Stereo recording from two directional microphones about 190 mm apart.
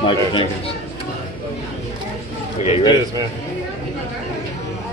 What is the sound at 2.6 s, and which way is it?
Speech, 35° left (ahead or behind).